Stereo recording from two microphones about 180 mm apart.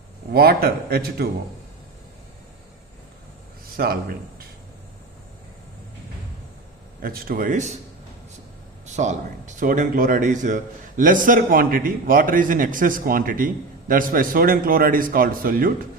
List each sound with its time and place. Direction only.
0.3 s a man's voice: 60° right (ahead or behind)
3.8 s a man's voice: 55° right (ahead or behind)
7.0 s a man's voice: 55° right (ahead or behind)
9.0 s a man's voice: 40° right (ahead or behind)